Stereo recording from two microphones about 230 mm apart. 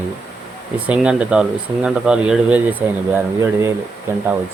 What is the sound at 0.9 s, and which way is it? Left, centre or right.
Speech, centre.